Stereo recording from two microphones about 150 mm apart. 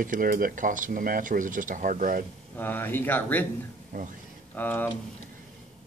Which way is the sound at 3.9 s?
60° right (ahead or behind).